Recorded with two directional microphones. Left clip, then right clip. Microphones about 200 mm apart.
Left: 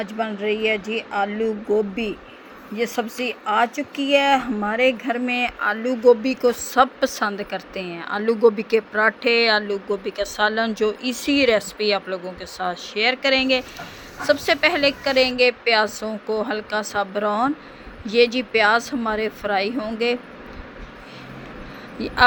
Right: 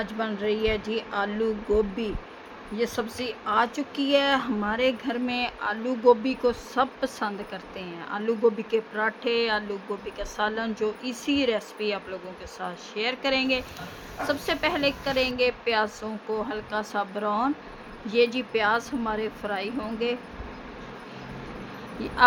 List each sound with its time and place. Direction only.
0.0 s a woman's voice: 15° left (ahead or behind)
22.0 s speech: 20° left (ahead or behind)